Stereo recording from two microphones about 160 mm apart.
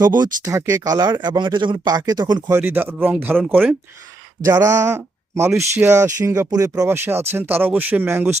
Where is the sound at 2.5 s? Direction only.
10° right (ahead or behind).